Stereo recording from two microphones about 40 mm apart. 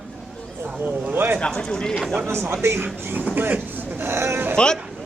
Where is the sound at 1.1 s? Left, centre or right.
Right.